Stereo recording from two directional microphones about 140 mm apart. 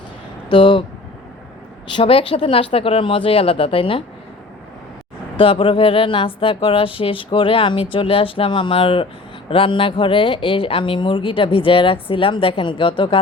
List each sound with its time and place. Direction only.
0.4 s speech: 35° left (ahead or behind)
1.9 s speech: 40° left (ahead or behind)
5.4 s speech: 40° left (ahead or behind)